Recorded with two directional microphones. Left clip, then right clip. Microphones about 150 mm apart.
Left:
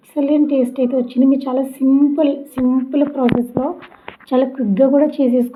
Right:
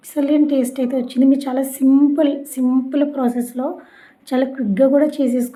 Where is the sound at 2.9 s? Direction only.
5° right (ahead or behind).